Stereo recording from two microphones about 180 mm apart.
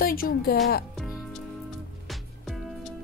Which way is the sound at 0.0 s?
55° left (ahead or behind).